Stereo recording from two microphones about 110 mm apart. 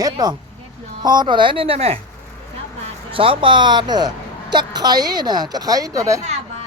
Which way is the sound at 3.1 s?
55° right (ahead or behind).